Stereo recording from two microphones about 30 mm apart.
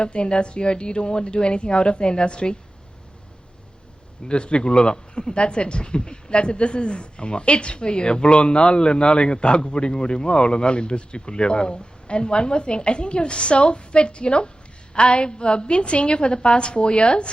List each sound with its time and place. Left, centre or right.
0.0 s a woman's voice: left
4.3 s a woman's voice: left